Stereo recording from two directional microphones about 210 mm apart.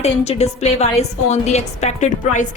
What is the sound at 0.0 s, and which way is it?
A woman's voice, 30° left (ahead or behind).